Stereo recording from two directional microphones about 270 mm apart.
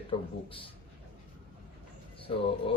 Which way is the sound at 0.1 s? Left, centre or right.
Centre.